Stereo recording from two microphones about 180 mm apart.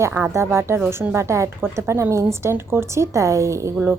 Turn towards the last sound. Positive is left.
turn(degrees=-15)  # may be behind; listen again after turning